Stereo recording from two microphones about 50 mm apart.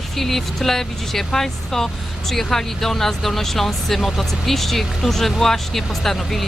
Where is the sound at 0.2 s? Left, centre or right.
Centre.